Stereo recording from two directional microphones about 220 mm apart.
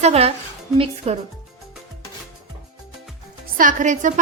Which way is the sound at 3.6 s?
35° right (ahead or behind).